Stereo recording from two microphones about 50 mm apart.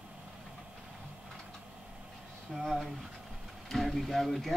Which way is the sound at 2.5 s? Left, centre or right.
Centre.